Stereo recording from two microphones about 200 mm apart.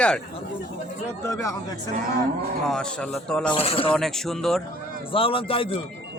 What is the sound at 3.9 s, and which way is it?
Speech, centre (ahead or behind).